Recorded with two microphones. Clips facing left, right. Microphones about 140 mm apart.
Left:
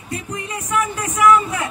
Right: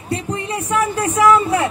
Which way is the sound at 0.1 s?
30° right (ahead or behind).